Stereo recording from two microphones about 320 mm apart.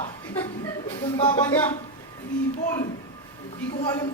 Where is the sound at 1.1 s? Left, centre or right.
Centre.